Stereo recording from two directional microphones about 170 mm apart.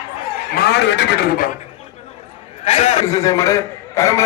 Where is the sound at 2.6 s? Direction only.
40° left (ahead or behind).